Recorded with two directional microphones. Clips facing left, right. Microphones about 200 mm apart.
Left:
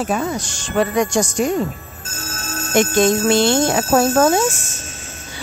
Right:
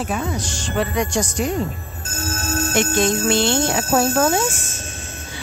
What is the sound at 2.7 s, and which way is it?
A woman's voice, 45° left (ahead or behind).